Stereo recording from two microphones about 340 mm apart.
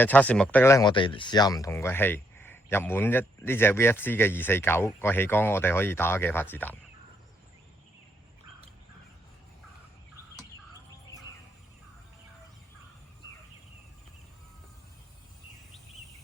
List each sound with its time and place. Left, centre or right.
0.0 s speech: centre